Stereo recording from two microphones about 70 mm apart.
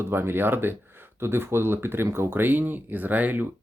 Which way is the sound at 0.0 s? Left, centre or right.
Right.